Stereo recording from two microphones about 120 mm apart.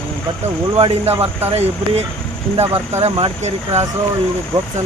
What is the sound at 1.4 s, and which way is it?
Speech, 60° right (ahead or behind).